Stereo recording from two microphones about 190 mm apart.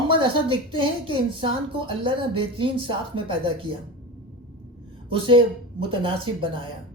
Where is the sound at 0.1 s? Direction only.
25° right (ahead or behind).